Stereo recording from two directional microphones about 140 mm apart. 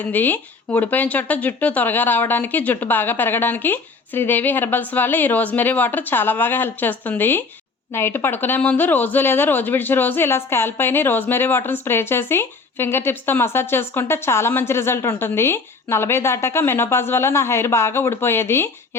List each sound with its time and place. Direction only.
0.0 s speech: 15° left (ahead or behind)